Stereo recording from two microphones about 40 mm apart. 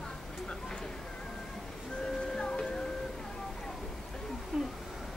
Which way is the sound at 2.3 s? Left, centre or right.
Centre.